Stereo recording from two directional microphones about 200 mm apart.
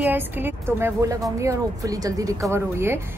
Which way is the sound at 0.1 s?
10° right (ahead or behind).